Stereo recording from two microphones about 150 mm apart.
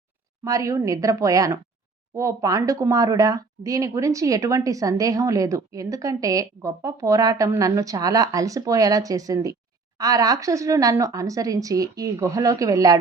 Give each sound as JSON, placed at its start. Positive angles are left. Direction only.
{"t": 0.4, "sound": "speech", "side_deg": -20}